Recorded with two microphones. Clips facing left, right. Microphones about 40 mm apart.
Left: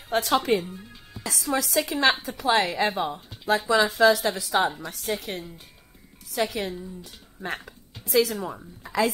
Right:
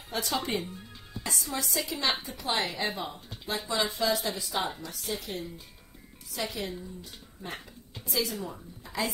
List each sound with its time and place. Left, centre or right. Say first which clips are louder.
0.1 s a woman's voice: left 9 dB; left
1.2 s a woman's voice: left 7 dB; left
2.6 s a woman's voice: left 7 dB; left
3.4 s speech: left 9 dB; left
4.8 s a woman's voice: left 6 dB; left
7.4 s speech: left 8 dB; left